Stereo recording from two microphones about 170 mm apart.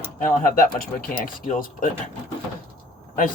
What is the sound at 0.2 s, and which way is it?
Speech, 55° left (ahead or behind).